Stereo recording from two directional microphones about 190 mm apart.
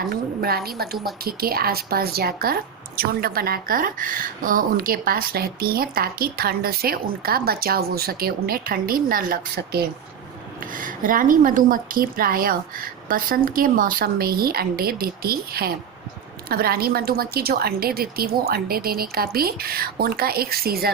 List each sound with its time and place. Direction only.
0.1 s speech: 50° right (ahead or behind)